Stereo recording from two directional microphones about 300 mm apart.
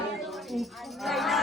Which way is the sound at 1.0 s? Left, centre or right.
Centre.